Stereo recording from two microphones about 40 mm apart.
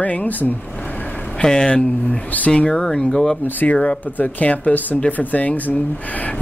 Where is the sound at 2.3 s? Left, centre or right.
Left.